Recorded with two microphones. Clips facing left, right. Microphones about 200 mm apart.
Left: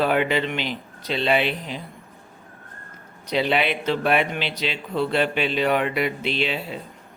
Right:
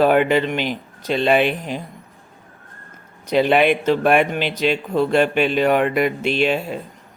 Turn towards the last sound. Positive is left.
turn(degrees=-50)  # may be behind; listen again after turning